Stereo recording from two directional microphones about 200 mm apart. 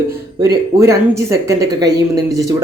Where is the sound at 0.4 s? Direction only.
15° right (ahead or behind).